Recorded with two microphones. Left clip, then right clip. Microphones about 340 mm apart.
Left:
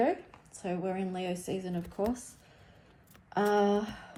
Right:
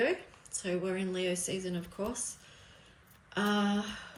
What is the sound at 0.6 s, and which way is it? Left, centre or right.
A woman's voice, left.